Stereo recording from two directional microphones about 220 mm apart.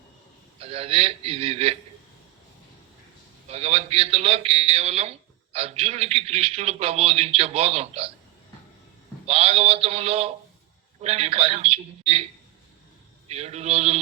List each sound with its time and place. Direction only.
0.6 s a man's voice: 25° right (ahead or behind)
3.5 s a man's voice: 30° right (ahead or behind)
9.2 s a man's voice: 25° right (ahead or behind)